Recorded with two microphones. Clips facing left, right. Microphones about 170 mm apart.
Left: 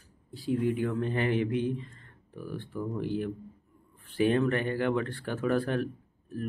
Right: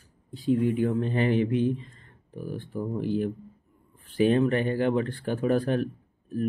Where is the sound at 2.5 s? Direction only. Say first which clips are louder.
Right 3 dB; 40° right (ahead or behind).